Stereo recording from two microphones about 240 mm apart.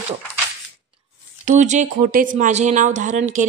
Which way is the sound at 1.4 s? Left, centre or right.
Right.